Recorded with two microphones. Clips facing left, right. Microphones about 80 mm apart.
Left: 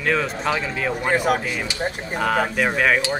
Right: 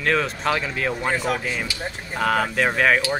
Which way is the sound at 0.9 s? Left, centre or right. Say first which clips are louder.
Left 7 dB; centre.